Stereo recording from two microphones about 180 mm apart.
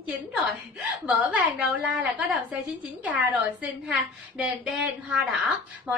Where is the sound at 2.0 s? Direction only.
5° right (ahead or behind).